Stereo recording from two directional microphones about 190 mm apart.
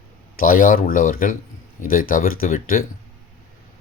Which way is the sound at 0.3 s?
45° left (ahead or behind).